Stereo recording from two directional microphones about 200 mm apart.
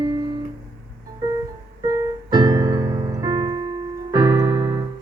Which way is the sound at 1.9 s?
20° right (ahead or behind).